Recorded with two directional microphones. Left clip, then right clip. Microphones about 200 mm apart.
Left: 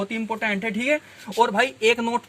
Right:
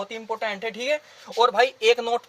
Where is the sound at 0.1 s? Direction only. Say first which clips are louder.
Left 3 dB; 40° right (ahead or behind).